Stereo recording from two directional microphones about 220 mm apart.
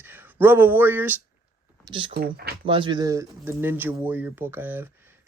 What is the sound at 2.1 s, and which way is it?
Speech, 45° right (ahead or behind).